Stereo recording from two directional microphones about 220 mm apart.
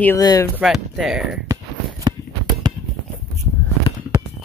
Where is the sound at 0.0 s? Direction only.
15° left (ahead or behind).